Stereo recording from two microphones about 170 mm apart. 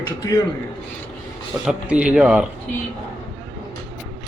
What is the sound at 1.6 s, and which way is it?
Speech, 5° right (ahead or behind).